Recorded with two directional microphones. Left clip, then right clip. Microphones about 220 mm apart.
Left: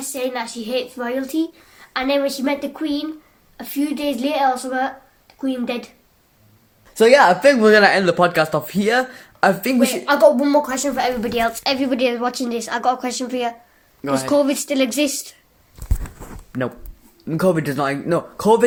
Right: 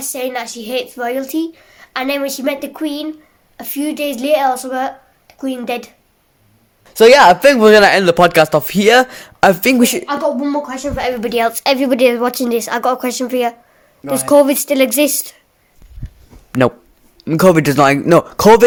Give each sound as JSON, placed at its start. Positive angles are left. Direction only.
{"t": 0.0, "sound": "speech", "side_deg": -50}
{"t": 6.9, "sound": "speech", "side_deg": -50}
{"t": 10.1, "sound": "a woman's voice", "side_deg": 45}
{"t": 11.2, "sound": "speech", "side_deg": -40}
{"t": 16.5, "sound": "speech", "side_deg": -50}